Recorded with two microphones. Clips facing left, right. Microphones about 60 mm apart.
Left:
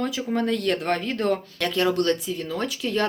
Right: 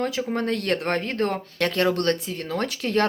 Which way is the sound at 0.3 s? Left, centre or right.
Right.